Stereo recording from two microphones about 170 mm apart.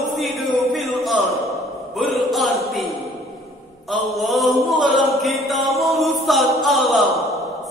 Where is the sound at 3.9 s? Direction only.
Centre (ahead or behind).